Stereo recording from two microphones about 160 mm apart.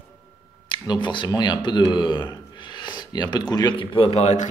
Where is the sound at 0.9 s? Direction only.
30° left (ahead or behind).